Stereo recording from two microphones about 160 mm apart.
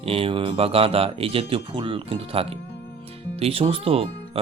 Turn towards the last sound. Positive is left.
turn(degrees=-35)  # may be behind; listen again after turning